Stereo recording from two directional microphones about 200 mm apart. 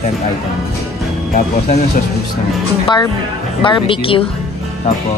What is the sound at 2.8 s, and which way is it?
Speech, 20° left (ahead or behind).